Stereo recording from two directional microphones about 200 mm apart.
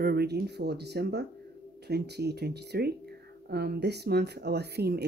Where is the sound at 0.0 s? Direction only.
55° right (ahead or behind).